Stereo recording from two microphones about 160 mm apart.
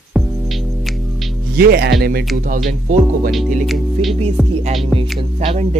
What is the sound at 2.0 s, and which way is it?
Speech, 75° right (ahead or behind).